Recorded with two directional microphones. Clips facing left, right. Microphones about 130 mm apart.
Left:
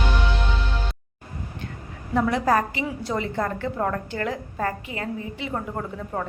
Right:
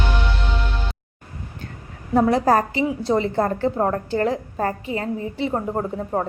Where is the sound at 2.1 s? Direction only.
35° right (ahead or behind).